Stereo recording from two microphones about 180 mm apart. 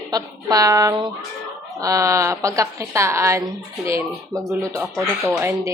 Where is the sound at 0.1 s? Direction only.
20° right (ahead or behind).